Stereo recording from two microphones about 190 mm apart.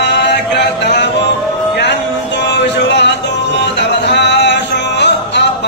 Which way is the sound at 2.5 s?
65° left (ahead or behind).